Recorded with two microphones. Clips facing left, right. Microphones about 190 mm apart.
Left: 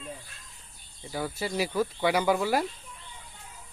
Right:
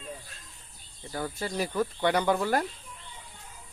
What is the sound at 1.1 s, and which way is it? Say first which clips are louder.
Speech: left 1 dB; 10° left (ahead or behind).